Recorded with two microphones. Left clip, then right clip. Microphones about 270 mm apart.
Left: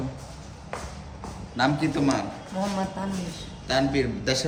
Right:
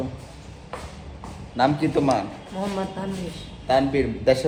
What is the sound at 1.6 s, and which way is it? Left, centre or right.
Speech, centre.